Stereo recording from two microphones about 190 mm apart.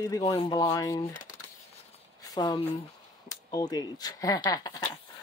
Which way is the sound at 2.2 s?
20° left (ahead or behind).